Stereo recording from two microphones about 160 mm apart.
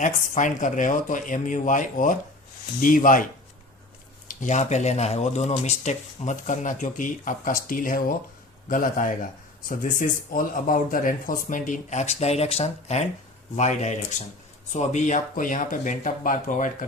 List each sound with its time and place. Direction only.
0.0 s a man's voice: 50° left (ahead or behind)
4.3 s a man's voice: 50° left (ahead or behind)